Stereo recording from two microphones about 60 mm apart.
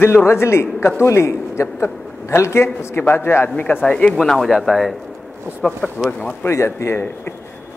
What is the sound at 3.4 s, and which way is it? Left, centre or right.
Speech, left.